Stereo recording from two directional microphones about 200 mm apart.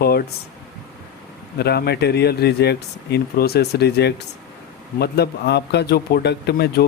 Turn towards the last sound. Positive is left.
turn(degrees=55)  # may be behind; listen again after turning